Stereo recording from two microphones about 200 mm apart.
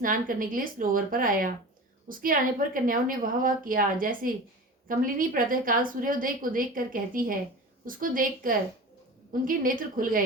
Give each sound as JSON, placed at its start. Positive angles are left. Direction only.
{"t": 0.0, "sound": "a woman's voice", "side_deg": -45}